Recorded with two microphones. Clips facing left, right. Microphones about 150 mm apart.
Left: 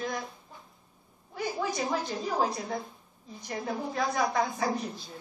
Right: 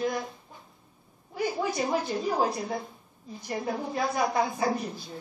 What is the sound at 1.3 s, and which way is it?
A woman's voice, 5° right (ahead or behind).